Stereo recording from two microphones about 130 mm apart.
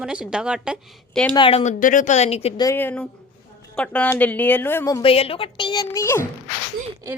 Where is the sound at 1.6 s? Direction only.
75° left (ahead or behind); by 2.5 s 55° left (ahead or behind).